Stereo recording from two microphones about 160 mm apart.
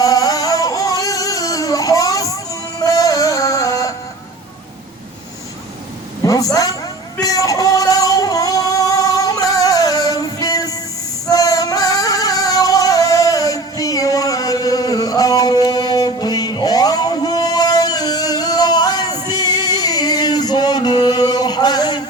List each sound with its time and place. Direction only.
0.0 s music: 20° left (ahead or behind)
6.2 s a sound: 20° left (ahead or behind)
7.2 s music: 20° left (ahead or behind)